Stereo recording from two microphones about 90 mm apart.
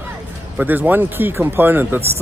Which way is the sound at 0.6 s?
20° right (ahead or behind).